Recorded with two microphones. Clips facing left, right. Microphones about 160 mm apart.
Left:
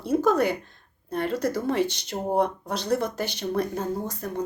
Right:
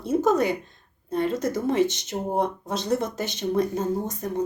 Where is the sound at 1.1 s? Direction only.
60° left (ahead or behind).